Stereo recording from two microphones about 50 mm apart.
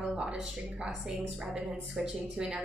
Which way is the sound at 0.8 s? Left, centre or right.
Centre.